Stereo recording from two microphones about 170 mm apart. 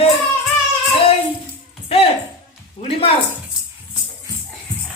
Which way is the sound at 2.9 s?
35° left (ahead or behind).